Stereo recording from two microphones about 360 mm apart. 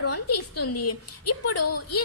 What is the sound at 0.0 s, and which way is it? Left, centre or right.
A woman's voice, left.